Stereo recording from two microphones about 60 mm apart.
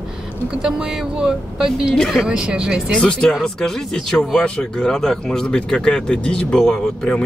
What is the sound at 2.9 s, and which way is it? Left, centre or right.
Speech, centre.